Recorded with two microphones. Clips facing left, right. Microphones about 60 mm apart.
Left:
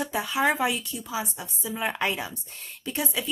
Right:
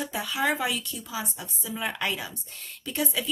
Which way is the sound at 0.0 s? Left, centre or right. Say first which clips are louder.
Left 3 dB; left.